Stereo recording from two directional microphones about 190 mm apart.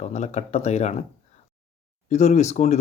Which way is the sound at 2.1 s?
35° left (ahead or behind).